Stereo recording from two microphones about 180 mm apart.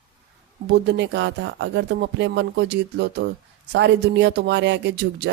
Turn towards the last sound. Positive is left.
turn(degrees=-70)  # may be behind; listen again after turning